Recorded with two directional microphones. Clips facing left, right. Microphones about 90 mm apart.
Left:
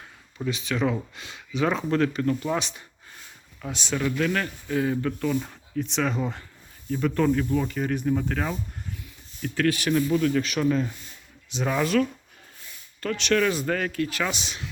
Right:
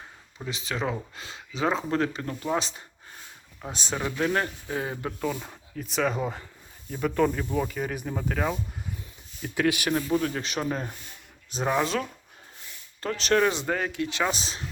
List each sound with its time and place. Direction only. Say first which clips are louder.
0.4 s speech: left 4 dB; 30° right (ahead or behind)
3.9 s speech: left 1 dB; 25° right (ahead or behind)
5.2 s speech: left 4 dB; 10° right (ahead or behind)
9.9 s speech: left 4 dB; 35° right (ahead or behind)
11.6 s speech: left 2 dB; 20° right (ahead or behind)
13.0 s speech: even; 30° right (ahead or behind)